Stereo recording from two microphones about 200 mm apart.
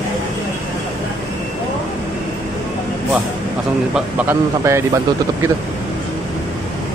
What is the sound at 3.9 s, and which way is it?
Speech, 10° right (ahead or behind).